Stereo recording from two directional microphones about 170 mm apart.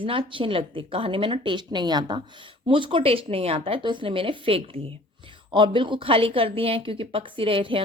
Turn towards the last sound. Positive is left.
turn(degrees=-30)  # may be behind; listen again after turning